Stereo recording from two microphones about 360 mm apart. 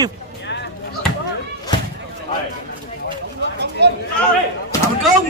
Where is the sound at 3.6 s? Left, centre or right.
Right.